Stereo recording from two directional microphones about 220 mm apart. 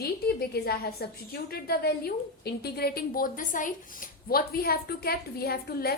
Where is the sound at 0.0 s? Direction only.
45° left (ahead or behind).